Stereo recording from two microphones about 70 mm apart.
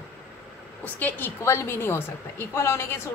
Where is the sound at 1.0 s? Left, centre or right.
Left.